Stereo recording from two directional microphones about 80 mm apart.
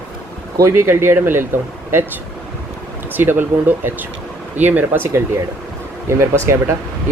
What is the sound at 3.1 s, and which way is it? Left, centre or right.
Speech, right.